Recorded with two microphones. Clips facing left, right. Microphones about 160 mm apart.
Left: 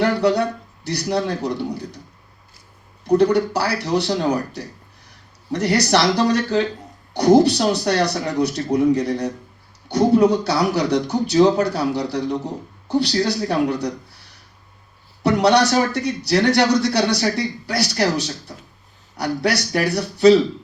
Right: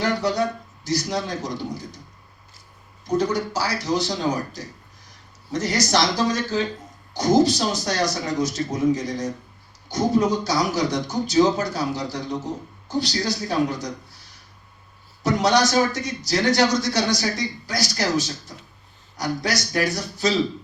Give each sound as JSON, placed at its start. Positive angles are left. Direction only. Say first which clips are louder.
{"t": 0.0, "sound": "a man's voice", "louder": "left 5 dB", "side_deg": 65}
{"t": 3.0, "sound": "a man's voice", "louder": "left 7 dB", "side_deg": 65}
{"t": 15.2, "sound": "a man's voice", "louder": "left 4 dB", "side_deg": 65}